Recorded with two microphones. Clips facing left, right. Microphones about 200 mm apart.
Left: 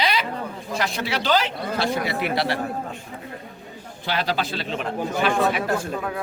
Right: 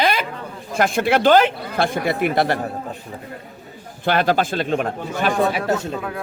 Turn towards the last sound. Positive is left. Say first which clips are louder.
# right 3 dB
turn(degrees=-25)  # may be behind; listen again after turning